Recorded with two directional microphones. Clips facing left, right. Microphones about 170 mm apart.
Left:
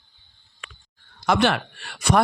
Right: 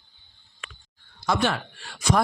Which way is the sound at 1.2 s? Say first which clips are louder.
Left 4 dB; 75° left (ahead or behind).